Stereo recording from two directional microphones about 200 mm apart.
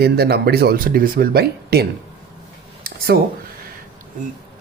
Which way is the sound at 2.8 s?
50° right (ahead or behind).